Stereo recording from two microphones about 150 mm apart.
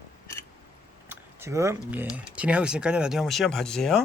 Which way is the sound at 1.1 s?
20° right (ahead or behind).